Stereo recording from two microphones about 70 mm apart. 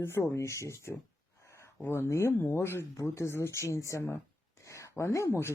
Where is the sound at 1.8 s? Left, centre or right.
Left.